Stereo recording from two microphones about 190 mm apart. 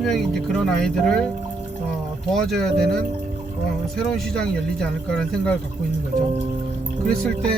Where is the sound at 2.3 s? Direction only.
Centre (ahead or behind).